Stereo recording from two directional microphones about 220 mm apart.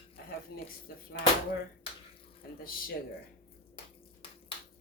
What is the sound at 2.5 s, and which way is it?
Speech, 40° left (ahead or behind).